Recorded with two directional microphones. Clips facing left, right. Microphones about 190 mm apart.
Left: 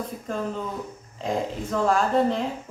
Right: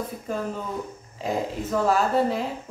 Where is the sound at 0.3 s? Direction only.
5° right (ahead or behind).